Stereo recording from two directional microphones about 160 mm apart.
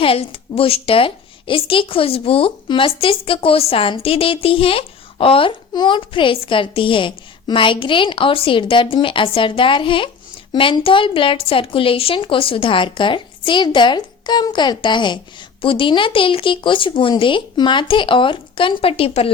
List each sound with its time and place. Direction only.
0.0 s a woman's voice: 35° left (ahead or behind)